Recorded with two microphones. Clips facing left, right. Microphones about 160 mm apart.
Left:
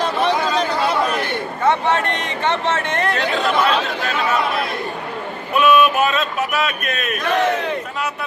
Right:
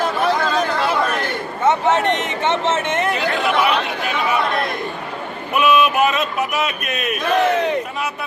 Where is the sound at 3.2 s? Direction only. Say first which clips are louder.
Even; 5° right (ahead or behind).